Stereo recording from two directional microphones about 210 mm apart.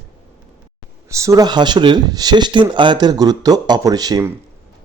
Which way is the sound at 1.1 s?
15° right (ahead or behind).